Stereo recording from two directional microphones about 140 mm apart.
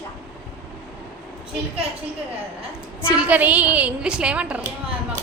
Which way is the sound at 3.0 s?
10° right (ahead or behind).